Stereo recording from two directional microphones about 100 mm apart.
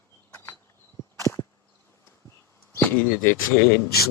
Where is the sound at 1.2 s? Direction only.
30° left (ahead or behind).